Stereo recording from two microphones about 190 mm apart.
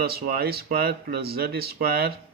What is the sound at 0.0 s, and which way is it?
Speech, 55° right (ahead or behind).